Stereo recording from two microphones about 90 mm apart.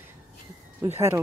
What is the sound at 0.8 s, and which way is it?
Speech, 30° right (ahead or behind).